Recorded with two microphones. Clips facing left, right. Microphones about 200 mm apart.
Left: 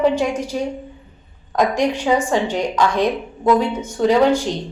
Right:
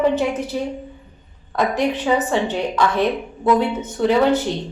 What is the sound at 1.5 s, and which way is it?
A woman's voice, 15° left (ahead or behind).